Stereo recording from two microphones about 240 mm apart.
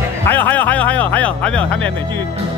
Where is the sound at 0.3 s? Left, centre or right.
Centre.